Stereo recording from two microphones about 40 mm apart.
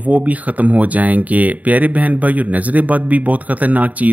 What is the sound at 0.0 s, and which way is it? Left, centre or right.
Speech, right.